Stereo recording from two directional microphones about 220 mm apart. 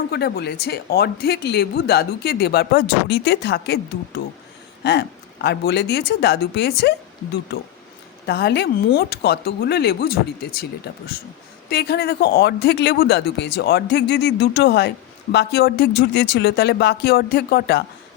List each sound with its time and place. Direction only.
0.1 s speech: 45° left (ahead or behind)